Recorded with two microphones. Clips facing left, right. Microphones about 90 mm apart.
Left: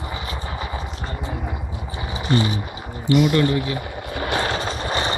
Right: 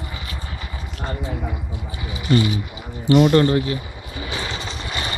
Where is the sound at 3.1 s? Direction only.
40° right (ahead or behind).